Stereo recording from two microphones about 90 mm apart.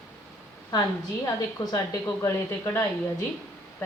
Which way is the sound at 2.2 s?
30° left (ahead or behind).